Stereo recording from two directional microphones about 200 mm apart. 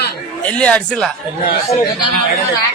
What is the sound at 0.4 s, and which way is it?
Speech, 5° left (ahead or behind).